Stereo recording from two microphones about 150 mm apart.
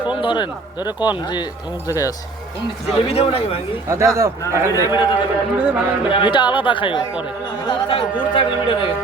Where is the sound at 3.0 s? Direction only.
40° left (ahead or behind).